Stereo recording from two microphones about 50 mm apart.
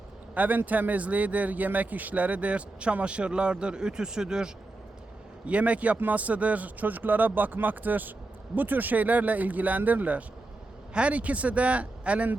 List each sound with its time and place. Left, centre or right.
0.3 s a man's voice: right; by 4.5 s centre
5.5 s a man's voice: right